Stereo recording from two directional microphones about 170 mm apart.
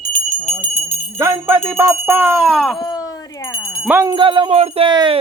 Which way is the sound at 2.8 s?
25° left (ahead or behind).